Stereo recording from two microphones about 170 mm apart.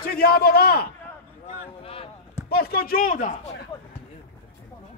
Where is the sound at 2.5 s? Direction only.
60° left (ahead or behind).